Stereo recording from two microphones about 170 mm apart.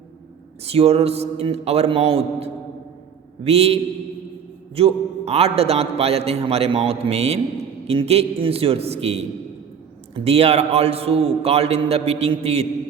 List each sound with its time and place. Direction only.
0.6 s a man's voice: 35° right (ahead or behind)